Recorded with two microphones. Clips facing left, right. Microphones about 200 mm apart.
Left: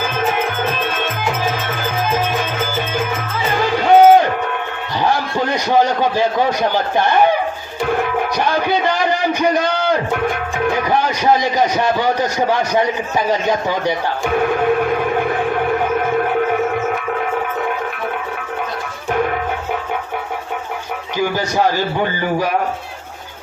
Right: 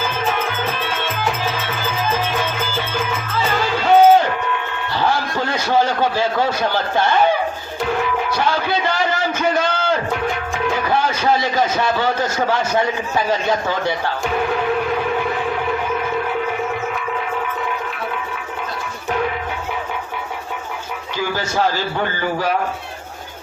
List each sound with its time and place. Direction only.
3.5 s music: 15° left (ahead or behind)
5.0 s a sound: 15° left (ahead or behind)
8.4 s a sound: 15° left (ahead or behind)
10.9 s a man's voice: 15° left (ahead or behind)
14.8 s music: 55° left (ahead or behind)
21.2 s a man's voice: 15° left (ahead or behind)